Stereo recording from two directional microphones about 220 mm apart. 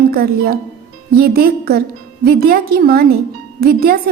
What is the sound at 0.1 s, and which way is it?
Speech, 45° right (ahead or behind).